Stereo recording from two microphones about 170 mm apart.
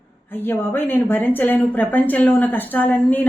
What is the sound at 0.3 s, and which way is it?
A woman's voice, 10° left (ahead or behind).